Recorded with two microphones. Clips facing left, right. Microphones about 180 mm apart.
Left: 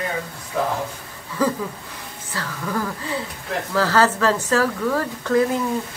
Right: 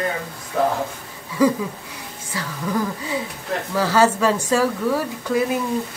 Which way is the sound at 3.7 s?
10° right (ahead or behind).